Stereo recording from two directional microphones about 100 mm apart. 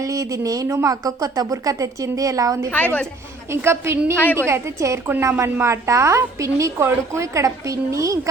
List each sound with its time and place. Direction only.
0.0 s a woman's voice: 35° right (ahead or behind)
2.6 s a woman's voice: 15° left (ahead or behind)
3.5 s a woman's voice: 25° right (ahead or behind)